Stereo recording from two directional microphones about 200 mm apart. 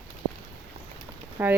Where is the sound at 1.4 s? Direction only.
10° right (ahead or behind).